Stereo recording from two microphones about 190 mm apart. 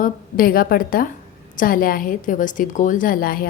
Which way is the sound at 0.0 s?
50° left (ahead or behind).